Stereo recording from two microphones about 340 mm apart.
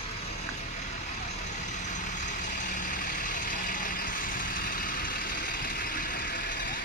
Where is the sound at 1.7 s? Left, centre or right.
Left.